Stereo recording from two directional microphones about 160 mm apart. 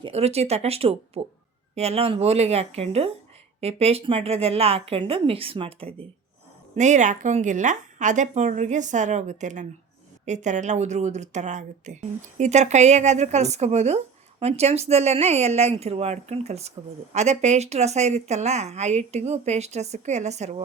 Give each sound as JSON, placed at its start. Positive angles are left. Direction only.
{"t": 0.0, "sound": "a woman's voice", "side_deg": -40}
{"t": 6.7, "sound": "speech", "side_deg": -50}